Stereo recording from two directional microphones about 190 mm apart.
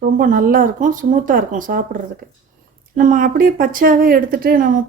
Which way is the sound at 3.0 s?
45° right (ahead or behind).